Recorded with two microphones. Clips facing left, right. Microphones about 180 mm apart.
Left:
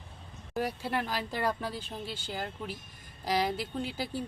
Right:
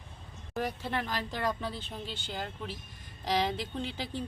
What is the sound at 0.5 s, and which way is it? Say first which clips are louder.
Speech: left 1 dB; 10° left (ahead or behind).